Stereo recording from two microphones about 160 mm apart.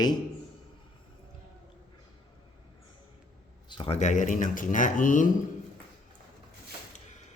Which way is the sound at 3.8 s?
45° left (ahead or behind).